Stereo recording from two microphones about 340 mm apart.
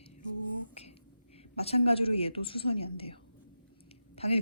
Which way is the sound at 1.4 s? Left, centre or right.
Centre.